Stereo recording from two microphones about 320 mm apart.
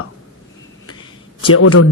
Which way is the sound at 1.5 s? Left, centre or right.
Left.